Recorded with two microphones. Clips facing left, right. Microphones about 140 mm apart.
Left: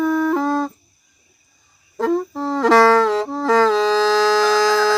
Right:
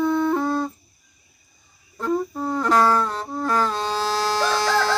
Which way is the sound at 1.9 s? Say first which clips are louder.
Left 5 dB; 90° left.